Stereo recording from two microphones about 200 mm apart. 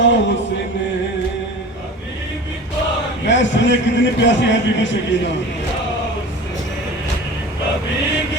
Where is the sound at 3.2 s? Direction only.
65° left (ahead or behind).